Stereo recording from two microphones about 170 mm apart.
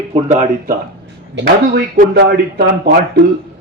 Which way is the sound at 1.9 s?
60° right (ahead or behind).